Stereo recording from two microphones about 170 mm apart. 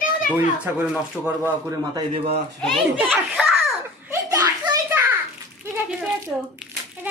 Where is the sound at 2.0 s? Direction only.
35° right (ahead or behind).